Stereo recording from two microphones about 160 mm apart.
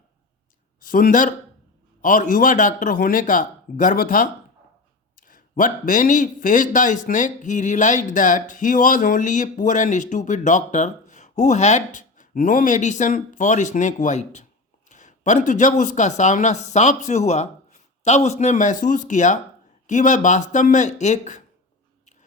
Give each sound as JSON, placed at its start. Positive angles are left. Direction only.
{"t": 0.8, "sound": "a man's voice", "side_deg": 60}